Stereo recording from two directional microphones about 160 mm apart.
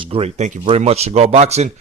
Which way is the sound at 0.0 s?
35° right (ahead or behind).